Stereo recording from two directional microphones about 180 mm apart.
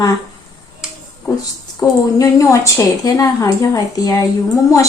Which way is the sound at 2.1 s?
15° left (ahead or behind).